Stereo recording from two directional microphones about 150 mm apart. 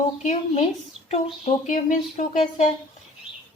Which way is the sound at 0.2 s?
50° left (ahead or behind).